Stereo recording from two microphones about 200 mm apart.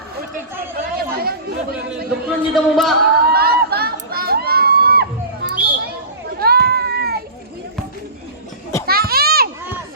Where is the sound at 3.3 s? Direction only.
50° right (ahead or behind).